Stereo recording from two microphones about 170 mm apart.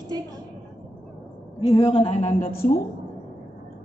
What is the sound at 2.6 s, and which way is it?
Speech, 55° left (ahead or behind).